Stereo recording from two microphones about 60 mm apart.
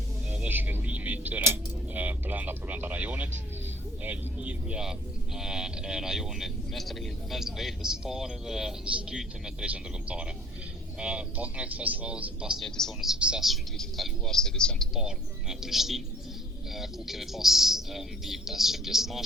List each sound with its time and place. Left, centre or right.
0.3 s a sound: right
1.9 s speech: right; by 8.7 s centre
8.8 s speech: centre
9.6 s a man's voice: right
12.6 s speech: centre
13.1 s speech: centre
13.7 s speech: centre
14.9 s speech: centre